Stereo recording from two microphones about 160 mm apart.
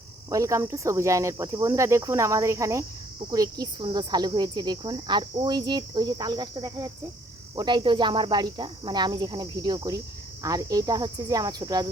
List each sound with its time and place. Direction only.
0.3 s speech: 20° right (ahead or behind)